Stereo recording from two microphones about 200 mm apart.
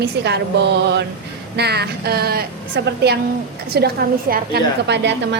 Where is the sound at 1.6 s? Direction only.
55° right (ahead or behind).